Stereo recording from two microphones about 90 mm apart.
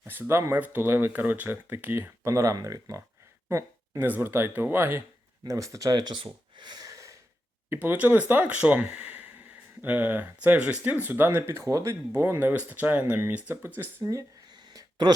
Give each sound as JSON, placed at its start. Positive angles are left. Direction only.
{"t": 0.0, "sound": "speech", "side_deg": -25}
{"t": 4.0, "sound": "speech", "side_deg": -25}
{"t": 5.5, "sound": "speech", "side_deg": -35}
{"t": 7.7, "sound": "speech", "side_deg": -20}
{"t": 14.5, "sound": "a sound", "side_deg": -50}